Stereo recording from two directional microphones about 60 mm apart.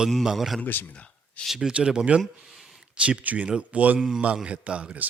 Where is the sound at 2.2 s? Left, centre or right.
Centre.